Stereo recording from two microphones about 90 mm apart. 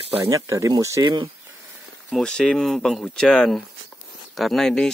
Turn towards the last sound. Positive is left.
turn(degrees=5)  # may be behind; listen again after turning